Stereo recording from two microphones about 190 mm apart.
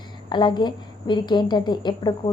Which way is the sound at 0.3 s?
25° left (ahead or behind).